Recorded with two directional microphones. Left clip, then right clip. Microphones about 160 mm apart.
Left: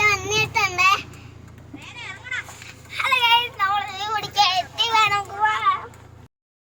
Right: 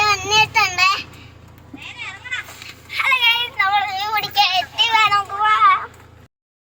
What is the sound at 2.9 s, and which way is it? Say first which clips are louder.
Child singing: right 2 dB; 10° left (ahead or behind).